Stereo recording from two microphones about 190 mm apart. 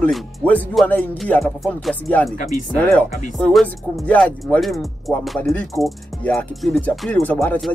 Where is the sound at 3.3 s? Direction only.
5° left (ahead or behind).